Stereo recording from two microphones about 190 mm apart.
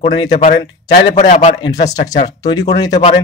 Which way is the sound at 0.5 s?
70° left (ahead or behind).